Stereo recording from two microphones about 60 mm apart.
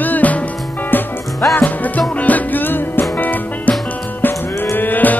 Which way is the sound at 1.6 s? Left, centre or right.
Left.